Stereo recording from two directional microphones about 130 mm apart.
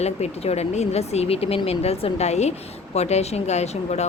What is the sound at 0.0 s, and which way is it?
Speech, 55° left (ahead or behind).